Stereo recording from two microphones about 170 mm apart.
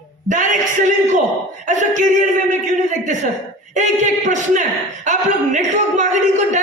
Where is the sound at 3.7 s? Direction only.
45° right (ahead or behind).